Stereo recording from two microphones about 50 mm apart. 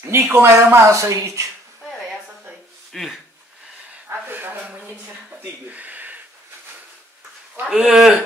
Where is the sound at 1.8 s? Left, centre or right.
Centre.